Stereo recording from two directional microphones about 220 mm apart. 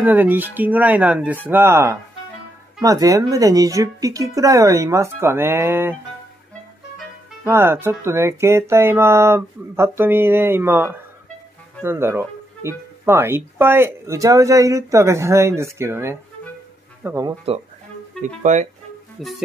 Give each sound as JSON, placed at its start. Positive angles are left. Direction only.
{"t": 0.0, "sound": "speech", "side_deg": -10}
{"t": 7.4, "sound": "speech", "side_deg": -10}
{"t": 18.2, "sound": "speech", "side_deg": -35}
{"t": 19.2, "sound": "music", "side_deg": 0}